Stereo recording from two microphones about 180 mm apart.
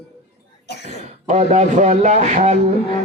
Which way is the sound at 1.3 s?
40° right (ahead or behind).